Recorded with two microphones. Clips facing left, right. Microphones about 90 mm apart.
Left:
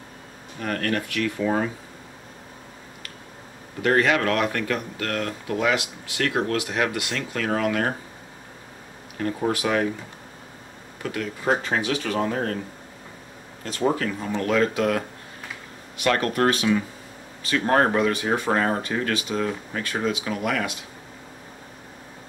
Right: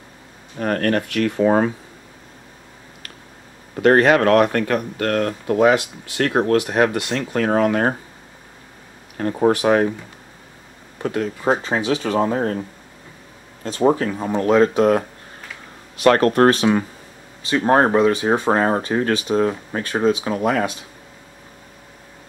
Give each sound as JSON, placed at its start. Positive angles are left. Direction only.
{"t": 0.6, "sound": "speech", "side_deg": -40}
{"t": 3.8, "sound": "speech", "side_deg": -45}
{"t": 9.2, "sound": "speech", "side_deg": -35}
{"t": 11.0, "sound": "speech", "side_deg": -35}
{"t": 13.7, "sound": "speech", "side_deg": -30}
{"t": 17.4, "sound": "speech", "side_deg": -25}